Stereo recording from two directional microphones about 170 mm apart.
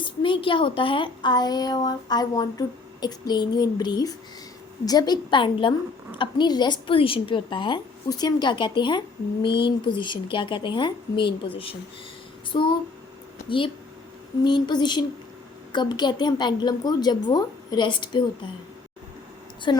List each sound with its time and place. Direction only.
0.0 s speech: 30° left (ahead or behind)
14.4 s speech: 25° left (ahead or behind)
19.7 s speech: 25° left (ahead or behind)